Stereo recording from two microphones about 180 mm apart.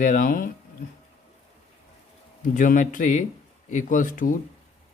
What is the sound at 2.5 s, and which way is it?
A man's voice, 45° left (ahead or behind).